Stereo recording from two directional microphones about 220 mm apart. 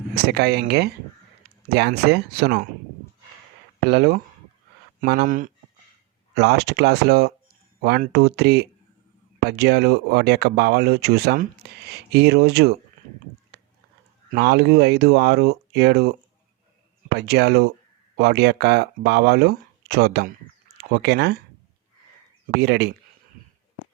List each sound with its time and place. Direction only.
0.3 s speech: 50° right (ahead or behind)
3.8 s speech: 45° right (ahead or behind)
14.3 s speech: 45° right (ahead or behind)
17.2 s speech: 50° right (ahead or behind)
22.4 s speech: 50° right (ahead or behind)